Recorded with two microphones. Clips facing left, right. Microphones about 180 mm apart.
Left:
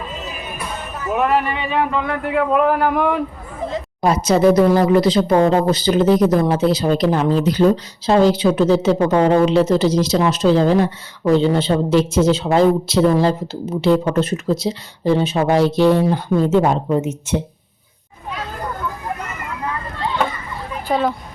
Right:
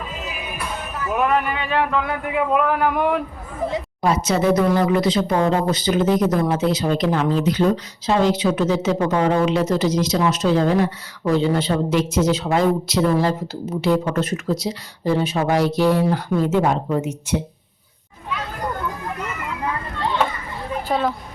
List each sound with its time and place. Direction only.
0.1 s music: 5° right (ahead or behind)
1.1 s speech: 5° right (ahead or behind)
3.6 s a sound: 10° right (ahead or behind)
4.0 s a woman's voice: 40° left (ahead or behind)
20.8 s speech: centre (ahead or behind)